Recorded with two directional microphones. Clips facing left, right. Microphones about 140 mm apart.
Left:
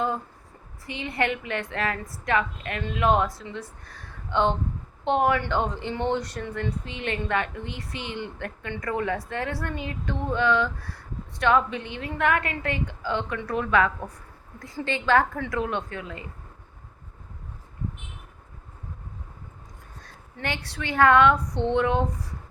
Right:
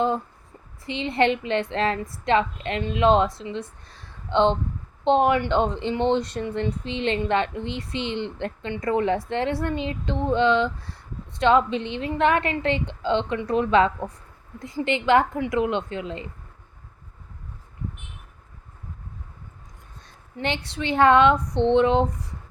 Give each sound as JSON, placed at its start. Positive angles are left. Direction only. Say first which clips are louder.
{"t": 0.9, "sound": "speech", "louder": "right 6 dB", "side_deg": -25}
{"t": 20.3, "sound": "speech", "louder": "right 4 dB", "side_deg": -25}